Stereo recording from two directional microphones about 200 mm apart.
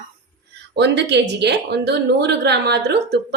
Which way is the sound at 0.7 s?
60° right (ahead or behind).